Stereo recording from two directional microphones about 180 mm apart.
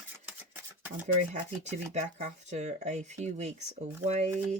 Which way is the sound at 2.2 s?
40° right (ahead or behind).